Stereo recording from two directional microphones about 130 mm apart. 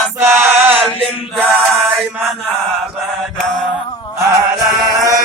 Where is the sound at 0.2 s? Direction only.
20° right (ahead or behind).